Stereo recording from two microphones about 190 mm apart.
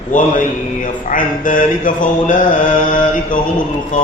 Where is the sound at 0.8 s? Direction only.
45° left (ahead or behind).